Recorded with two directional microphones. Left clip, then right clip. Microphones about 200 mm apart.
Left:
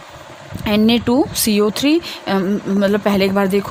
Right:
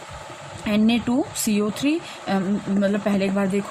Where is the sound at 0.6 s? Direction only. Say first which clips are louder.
Left 7 dB; 50° left (ahead or behind).